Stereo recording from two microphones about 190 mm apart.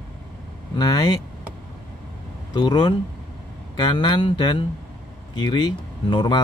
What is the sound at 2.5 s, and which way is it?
Speech, 25° left (ahead or behind).